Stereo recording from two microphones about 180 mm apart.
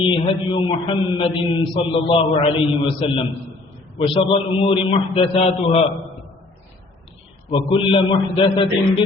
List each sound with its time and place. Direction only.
0.5 s a man's voice: 30° left (ahead or behind)
7.5 s a man's voice: 30° left (ahead or behind)